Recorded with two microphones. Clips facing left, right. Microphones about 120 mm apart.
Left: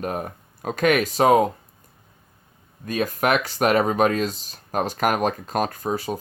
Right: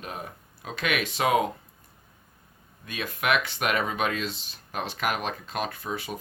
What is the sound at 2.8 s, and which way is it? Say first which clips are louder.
Speech: left 6 dB; 40° left (ahead or behind).